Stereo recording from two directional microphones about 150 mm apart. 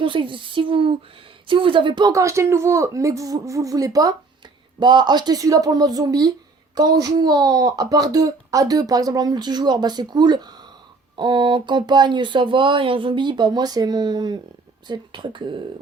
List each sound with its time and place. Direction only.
0.0 s speech: 35° right (ahead or behind)